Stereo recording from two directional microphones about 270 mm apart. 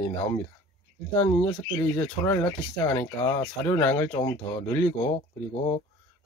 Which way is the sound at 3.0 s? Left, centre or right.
Centre.